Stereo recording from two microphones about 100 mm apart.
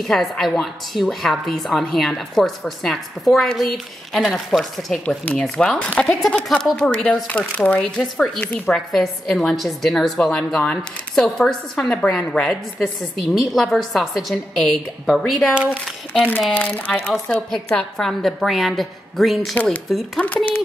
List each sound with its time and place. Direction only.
0.0 s a woman's voice: centre (ahead or behind)
5.0 s a woman's voice: 15° left (ahead or behind)
15.5 s speech: 15° right (ahead or behind)
16.5 s a woman's voice: 15° left (ahead or behind)
19.5 s speech: 15° left (ahead or behind)